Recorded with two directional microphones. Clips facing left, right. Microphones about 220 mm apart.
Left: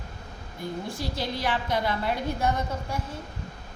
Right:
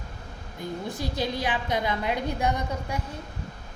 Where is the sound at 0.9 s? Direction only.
15° right (ahead or behind).